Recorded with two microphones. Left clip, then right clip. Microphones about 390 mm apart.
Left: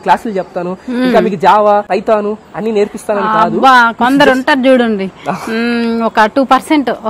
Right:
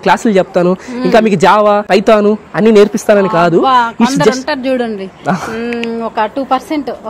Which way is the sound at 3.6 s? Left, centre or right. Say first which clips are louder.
Left 3 dB; left.